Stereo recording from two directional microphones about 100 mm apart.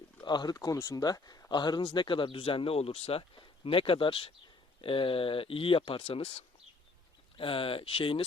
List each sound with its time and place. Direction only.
0.2 s speech: 45° left (ahead or behind); by 6.4 s 85° left
7.3 s speech: 60° left (ahead or behind)